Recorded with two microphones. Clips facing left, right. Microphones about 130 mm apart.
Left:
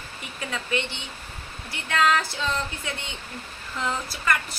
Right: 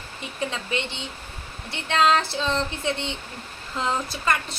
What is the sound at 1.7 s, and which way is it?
A woman's voice, 25° right (ahead or behind).